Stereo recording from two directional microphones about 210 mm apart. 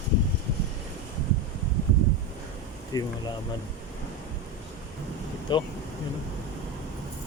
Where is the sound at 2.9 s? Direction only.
15° left (ahead or behind).